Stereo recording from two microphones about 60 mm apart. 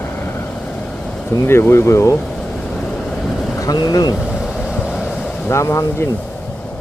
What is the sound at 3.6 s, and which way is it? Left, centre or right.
Speech, left.